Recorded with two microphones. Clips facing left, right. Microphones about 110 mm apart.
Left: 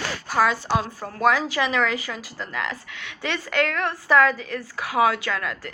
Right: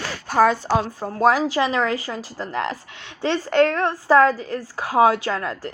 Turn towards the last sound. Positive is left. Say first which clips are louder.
# right 3 dB
turn(degrees=-25)  # may be behind; listen again after turning